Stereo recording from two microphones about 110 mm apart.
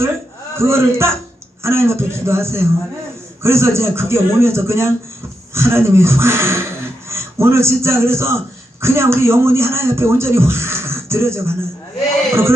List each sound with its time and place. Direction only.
0.6 s a man's voice: 25° right (ahead or behind)